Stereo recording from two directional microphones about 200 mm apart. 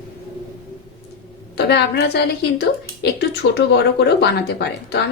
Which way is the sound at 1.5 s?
55° left (ahead or behind).